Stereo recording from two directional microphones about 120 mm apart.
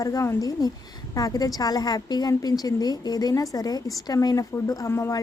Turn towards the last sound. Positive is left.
turn(degrees=20)  # may be behind; listen again after turning